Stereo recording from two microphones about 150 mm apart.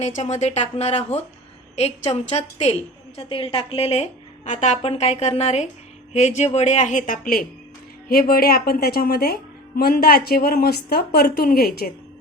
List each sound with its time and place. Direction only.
0.0 s a woman's voice: 50° left (ahead or behind); by 11.9 s 90° left